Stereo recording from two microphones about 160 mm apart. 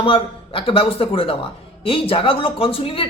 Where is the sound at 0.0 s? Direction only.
35° left (ahead or behind).